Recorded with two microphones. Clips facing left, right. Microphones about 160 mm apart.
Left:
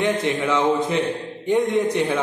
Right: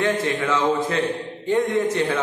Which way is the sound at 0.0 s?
20° left (ahead or behind).